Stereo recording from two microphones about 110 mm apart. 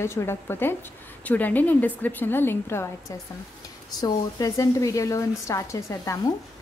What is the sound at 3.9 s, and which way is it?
A woman's voice, 35° left (ahead or behind).